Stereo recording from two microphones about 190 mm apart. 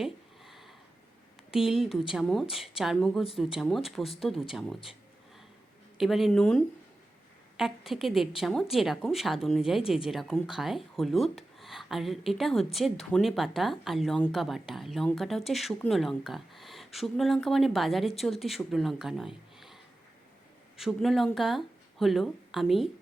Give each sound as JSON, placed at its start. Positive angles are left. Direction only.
{"t": 0.0, "sound": "a sound", "side_deg": 0}
{"t": 1.5, "sound": "speech", "side_deg": -5}
{"t": 6.0, "sound": "speech", "side_deg": 0}